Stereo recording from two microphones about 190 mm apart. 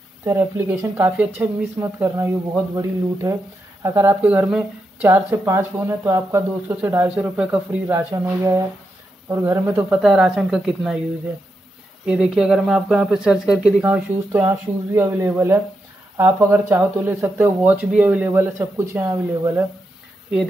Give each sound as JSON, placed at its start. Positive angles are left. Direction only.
{"t": 0.2, "sound": "speech", "side_deg": -15}
{"t": 8.1, "sound": "speech", "side_deg": -20}
{"t": 12.1, "sound": "speech", "side_deg": -5}